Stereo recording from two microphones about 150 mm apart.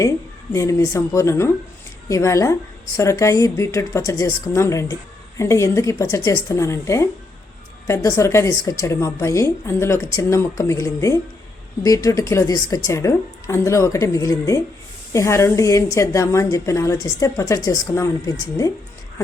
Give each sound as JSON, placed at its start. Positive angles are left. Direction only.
{"t": 0.5, "sound": "a woman's voice", "side_deg": 20}